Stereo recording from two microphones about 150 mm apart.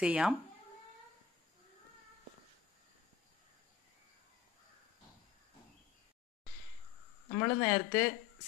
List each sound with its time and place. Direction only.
0.0 s speech: 5° right (ahead or behind)
7.3 s speech: 20° left (ahead or behind)
7.7 s speech: 10° left (ahead or behind)